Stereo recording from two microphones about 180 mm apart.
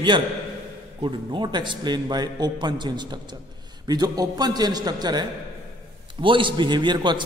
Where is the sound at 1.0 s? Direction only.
25° right (ahead or behind).